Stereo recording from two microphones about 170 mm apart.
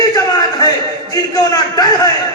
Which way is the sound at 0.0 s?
25° left (ahead or behind).